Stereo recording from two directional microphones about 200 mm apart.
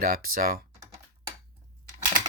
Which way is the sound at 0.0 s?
45° right (ahead or behind).